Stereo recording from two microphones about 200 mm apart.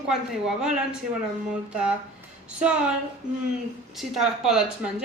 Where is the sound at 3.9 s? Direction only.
Centre (ahead or behind).